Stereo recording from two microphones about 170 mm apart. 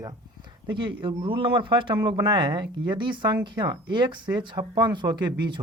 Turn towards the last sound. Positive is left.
turn(degrees=-25)  # may be behind; listen again after turning